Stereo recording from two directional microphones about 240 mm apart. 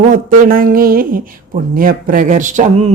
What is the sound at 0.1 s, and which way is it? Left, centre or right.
Speech, right.